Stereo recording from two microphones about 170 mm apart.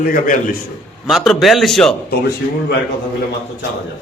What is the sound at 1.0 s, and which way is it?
Speech, centre (ahead or behind).